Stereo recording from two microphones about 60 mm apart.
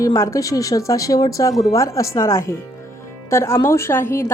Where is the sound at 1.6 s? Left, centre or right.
Left.